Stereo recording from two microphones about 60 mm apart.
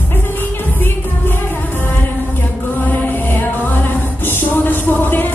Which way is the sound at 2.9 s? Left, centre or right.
Left.